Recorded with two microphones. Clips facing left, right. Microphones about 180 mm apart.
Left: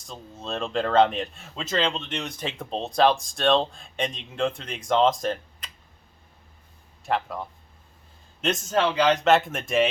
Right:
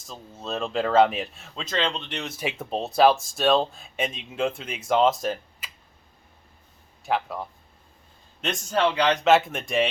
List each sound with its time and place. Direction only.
0.0 s speech: centre (ahead or behind)
7.0 s speech: centre (ahead or behind)
8.4 s speech: centre (ahead or behind)